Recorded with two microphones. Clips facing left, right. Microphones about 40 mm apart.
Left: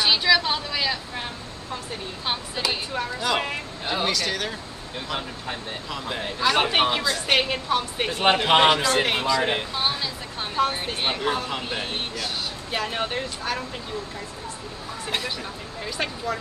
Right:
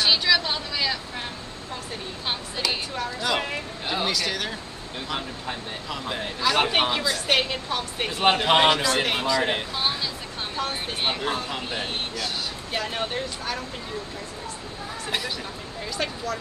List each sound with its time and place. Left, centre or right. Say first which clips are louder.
0.0 s vehicle: left 1 dB; centre
2.2 s a woman's voice: left 1 dB; centre
15.0 s a man's voice: left 1 dB; centre
16.3 s speech: left 2 dB; left